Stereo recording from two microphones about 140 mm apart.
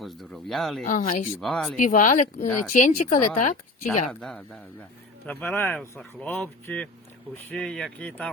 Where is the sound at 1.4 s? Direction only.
5° left (ahead or behind).